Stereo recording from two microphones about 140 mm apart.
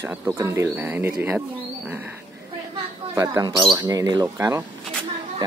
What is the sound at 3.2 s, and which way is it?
Speech, 25° right (ahead or behind).